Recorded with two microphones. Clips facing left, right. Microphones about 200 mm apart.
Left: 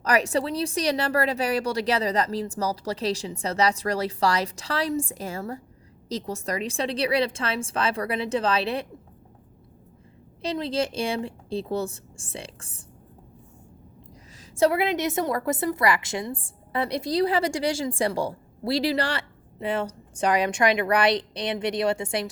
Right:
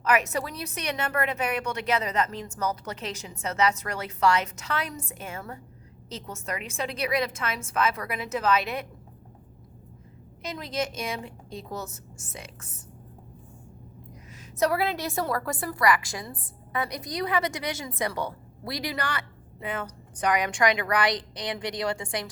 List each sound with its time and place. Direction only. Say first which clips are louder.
0.0 s a woman's voice: left 3 dB; 35° left (ahead or behind)
10.4 s a woman's voice: left 5 dB; 30° left (ahead or behind)
14.5 s a woman's voice: left 4 dB; 25° left (ahead or behind)